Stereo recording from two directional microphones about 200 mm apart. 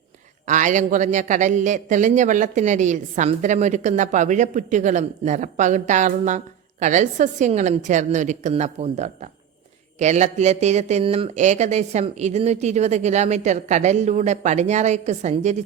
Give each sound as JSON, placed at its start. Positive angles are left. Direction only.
{"t": 0.4, "sound": "a man's voice", "side_deg": -40}